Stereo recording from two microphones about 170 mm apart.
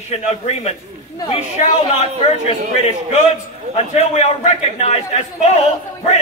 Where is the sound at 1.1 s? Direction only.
30° left (ahead or behind).